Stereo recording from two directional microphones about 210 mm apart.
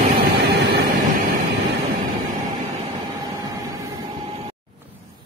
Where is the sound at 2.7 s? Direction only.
15° right (ahead or behind).